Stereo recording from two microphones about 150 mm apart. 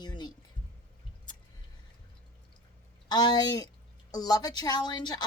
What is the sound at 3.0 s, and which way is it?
A woman's voice, 25° left (ahead or behind).